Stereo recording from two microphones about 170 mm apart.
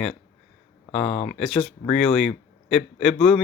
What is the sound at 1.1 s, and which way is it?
Speech, 40° left (ahead or behind).